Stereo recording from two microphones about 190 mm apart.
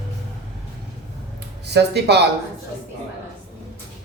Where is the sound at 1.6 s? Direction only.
60° right (ahead or behind).